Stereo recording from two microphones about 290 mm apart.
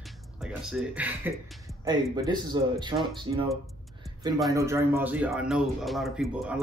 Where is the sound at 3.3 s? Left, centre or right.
Right.